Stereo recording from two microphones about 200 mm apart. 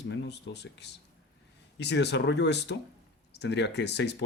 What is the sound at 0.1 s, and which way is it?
Speech, 60° left (ahead or behind).